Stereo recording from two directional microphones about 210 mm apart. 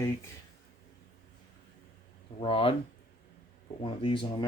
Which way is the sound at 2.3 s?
25° left (ahead or behind).